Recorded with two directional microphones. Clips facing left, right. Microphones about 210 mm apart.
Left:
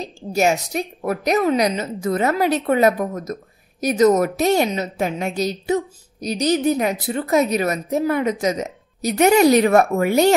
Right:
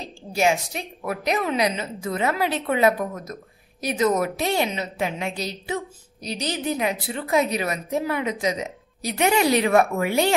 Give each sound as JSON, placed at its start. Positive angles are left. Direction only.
{"t": 0.3, "sound": "a woman's voice", "side_deg": 40}